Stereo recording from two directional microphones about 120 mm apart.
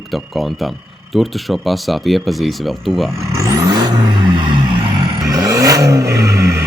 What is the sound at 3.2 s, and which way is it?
Vehicle, 25° right (ahead or behind).